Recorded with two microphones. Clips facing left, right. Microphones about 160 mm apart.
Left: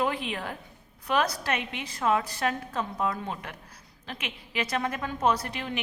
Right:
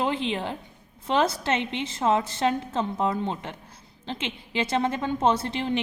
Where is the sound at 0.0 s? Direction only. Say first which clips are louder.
Right 3 dB; 25° right (ahead or behind).